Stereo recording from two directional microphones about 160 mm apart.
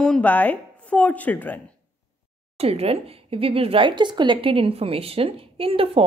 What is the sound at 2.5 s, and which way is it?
Speech, 40° right (ahead or behind).